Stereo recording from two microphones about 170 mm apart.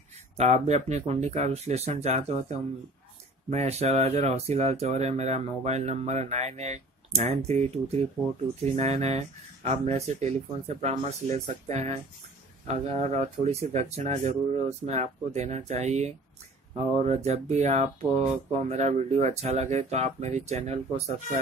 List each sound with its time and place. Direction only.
0.4 s speech: 40° right (ahead or behind)